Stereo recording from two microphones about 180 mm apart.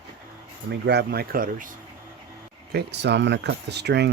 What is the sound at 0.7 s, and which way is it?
Speech, 70° right (ahead or behind).